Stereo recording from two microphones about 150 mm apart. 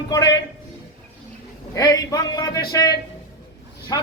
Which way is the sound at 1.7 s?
20° left (ahead or behind).